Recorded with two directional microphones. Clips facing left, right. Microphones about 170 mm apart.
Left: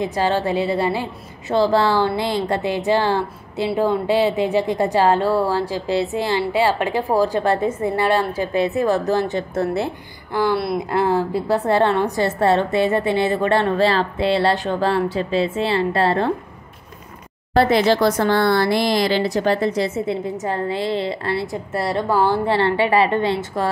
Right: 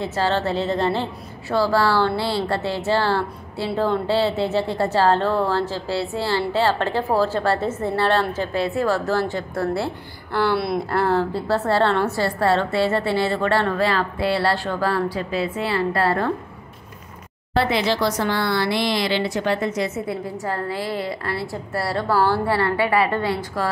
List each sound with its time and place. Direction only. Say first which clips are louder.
0.0 s speech: left 2 dB; 15° left (ahead or behind)
1.5 s speech: left 2 dB; 20° left (ahead or behind)
10.5 s speech: left 1 dB; centre (ahead or behind)
10.9 s a woman's voice: left 2 dB; 15° left (ahead or behind)
17.6 s speech: left 5 dB; 45° left (ahead or behind)
20.2 s a woman's voice: left 3 dB; 20° left (ahead or behind)